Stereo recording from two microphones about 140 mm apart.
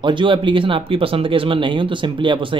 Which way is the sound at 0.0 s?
35° right (ahead or behind).